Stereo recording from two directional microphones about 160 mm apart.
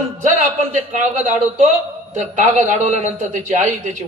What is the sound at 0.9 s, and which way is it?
A man's voice, 55° right (ahead or behind).